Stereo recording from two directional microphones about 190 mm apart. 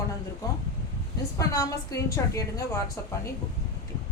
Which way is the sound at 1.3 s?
20° left (ahead or behind).